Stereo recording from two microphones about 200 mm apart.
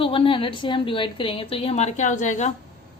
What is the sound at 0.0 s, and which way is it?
A woman's voice, 25° left (ahead or behind).